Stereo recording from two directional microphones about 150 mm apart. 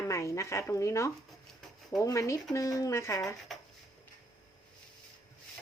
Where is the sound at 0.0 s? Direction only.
20° left (ahead or behind).